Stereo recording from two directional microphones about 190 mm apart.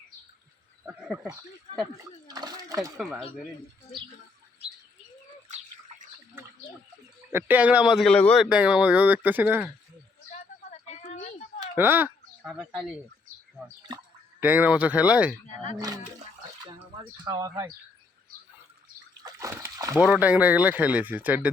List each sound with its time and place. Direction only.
1.0 s speech: centre (ahead or behind)
2.2 s a sound: 20° right (ahead or behind)
3.0 s speech: centre (ahead or behind)
5.5 s a sound: 40° right (ahead or behind)
7.3 s speech: 10° right (ahead or behind)
10.7 s a sound: 35° left (ahead or behind)
11.8 s speech: 10° right (ahead or behind)
14.4 s speech: 10° right (ahead or behind)
17.2 s speech: 20° right (ahead or behind)
19.2 s splash: 15° right (ahead or behind)
20.1 s speech: 10° right (ahead or behind)